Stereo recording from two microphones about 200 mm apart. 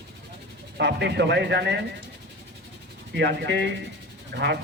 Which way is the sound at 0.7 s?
60° right (ahead or behind).